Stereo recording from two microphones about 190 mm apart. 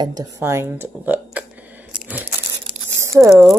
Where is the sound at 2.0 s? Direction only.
10° right (ahead or behind).